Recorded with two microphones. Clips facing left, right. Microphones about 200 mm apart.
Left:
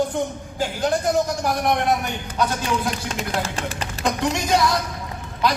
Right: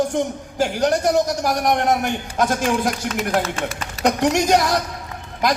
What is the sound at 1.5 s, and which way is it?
Speech, 45° right (ahead or behind).